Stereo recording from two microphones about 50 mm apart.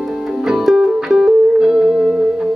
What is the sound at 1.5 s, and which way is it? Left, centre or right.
Music, centre.